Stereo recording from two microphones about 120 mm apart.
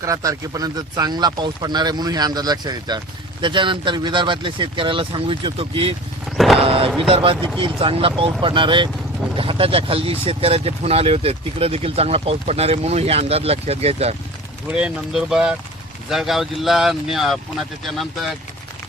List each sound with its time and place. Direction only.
0.0 s speech: 30° right (ahead or behind); by 5.9 s 45° right (ahead or behind)
6.3 s vehicle: centre (ahead or behind)
6.6 s speech: 50° right (ahead or behind)
14.7 s speech: 5° right (ahead or behind)